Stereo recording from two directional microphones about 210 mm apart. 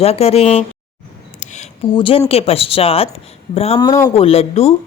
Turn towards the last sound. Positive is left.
turn(degrees=30)  # may be behind; listen again after turning